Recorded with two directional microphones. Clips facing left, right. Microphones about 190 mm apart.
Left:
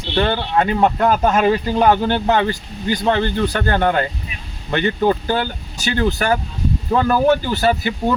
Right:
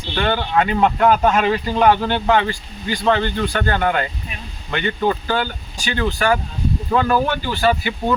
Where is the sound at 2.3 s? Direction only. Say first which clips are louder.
Even; 40° left (ahead or behind).